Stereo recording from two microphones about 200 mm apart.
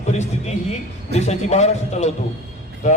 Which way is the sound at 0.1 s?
35° left (ahead or behind).